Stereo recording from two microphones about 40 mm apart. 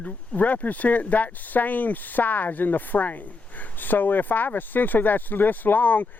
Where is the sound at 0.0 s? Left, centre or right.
Left.